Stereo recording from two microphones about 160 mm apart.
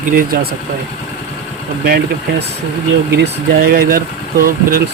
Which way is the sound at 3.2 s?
70° right (ahead or behind).